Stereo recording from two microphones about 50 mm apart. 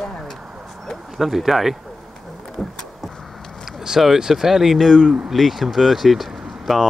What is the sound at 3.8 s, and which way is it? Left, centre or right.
Speech, centre.